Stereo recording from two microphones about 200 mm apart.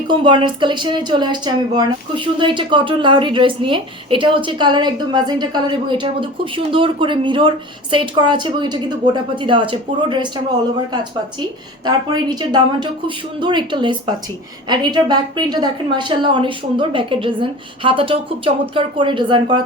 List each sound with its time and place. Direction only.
0.1 s a woman's voice: 25° right (ahead or behind)
11.9 s a woman's voice: 20° right (ahead or behind)